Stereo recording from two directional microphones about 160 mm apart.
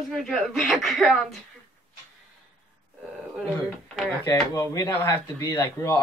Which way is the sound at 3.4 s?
Centre (ahead or behind).